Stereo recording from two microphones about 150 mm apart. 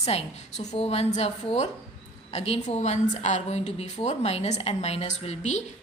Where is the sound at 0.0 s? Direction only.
45° left (ahead or behind).